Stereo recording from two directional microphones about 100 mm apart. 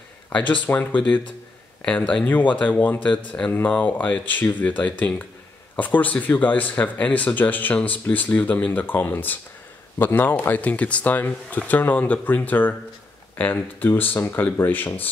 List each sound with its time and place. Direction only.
0.3 s speech: 15° left (ahead or behind)